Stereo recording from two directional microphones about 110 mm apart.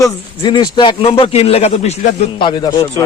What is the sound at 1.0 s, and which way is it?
Speech, 65° left (ahead or behind).